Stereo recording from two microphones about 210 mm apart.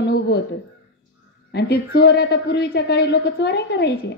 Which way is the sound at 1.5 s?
50° left (ahead or behind).